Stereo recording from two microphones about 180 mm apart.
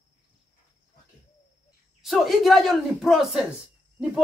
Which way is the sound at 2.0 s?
Centre (ahead or behind).